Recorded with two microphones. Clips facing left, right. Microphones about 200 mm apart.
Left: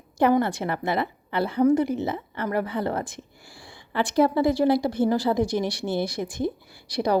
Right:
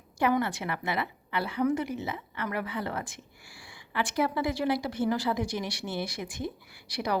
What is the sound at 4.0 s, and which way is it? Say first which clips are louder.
A woman's voice: left 8 dB; 35° left (ahead or behind).